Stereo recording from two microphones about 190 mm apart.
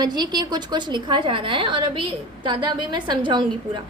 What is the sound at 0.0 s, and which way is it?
A woman's voice, 20° right (ahead or behind).